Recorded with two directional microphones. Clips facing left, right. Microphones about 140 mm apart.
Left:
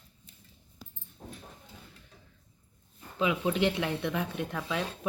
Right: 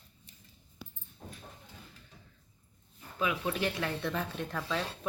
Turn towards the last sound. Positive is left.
turn(degrees=10)  # may be behind; listen again after turning